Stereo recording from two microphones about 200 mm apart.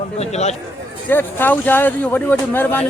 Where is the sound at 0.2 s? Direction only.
35° left (ahead or behind).